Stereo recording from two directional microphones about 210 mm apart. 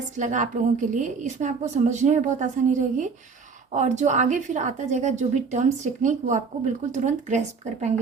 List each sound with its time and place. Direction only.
0.2 s a woman's voice: 35° right (ahead or behind)